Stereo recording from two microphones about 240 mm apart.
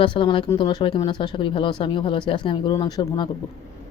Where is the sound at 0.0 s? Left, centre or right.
Left.